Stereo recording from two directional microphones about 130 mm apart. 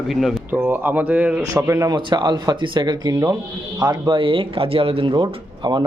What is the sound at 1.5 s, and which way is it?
Speech, 25° right (ahead or behind).